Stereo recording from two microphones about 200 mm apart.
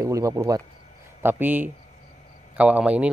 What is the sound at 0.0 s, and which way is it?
A man's voice, 15° right (ahead or behind).